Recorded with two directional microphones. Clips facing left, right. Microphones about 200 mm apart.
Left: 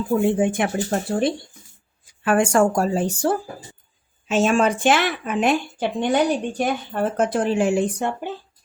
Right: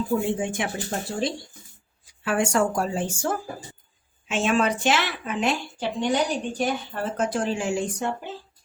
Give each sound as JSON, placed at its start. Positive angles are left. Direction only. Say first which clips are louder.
{"t": 0.3, "sound": "a woman's voice", "louder": "left 7 dB", "side_deg": 55}